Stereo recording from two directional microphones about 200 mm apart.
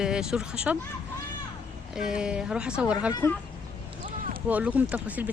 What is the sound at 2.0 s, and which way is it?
Speech, 5° right (ahead or behind).